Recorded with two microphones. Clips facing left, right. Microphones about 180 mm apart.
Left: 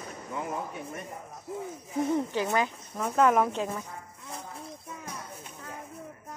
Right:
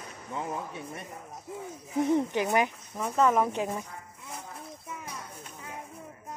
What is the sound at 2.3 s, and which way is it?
Speech, 15° right (ahead or behind).